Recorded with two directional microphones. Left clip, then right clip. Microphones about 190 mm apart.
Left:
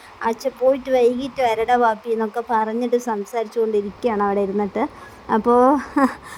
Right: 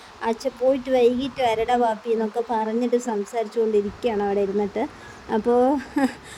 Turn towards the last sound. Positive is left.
turn(degrees=20)  # may be behind; listen again after turning